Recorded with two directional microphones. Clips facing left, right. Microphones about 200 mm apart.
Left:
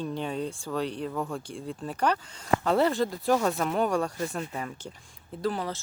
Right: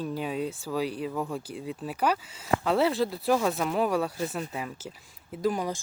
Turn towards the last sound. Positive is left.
turn(degrees=-15)  # may be behind; listen again after turning